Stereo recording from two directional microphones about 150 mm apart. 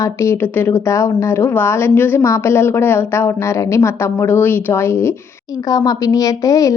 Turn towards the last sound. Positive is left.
turn(degrees=20)  # may be behind; listen again after turning